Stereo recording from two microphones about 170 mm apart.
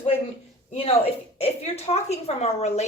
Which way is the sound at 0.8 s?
35° left (ahead or behind).